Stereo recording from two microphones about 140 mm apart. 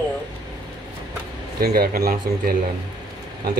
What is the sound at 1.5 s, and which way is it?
Speech, 90° right.